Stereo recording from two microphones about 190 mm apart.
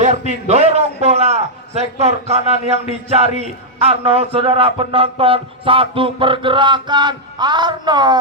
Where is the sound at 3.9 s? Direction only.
30° right (ahead or behind).